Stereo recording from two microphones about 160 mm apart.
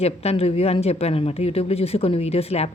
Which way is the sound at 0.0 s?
40° left (ahead or behind).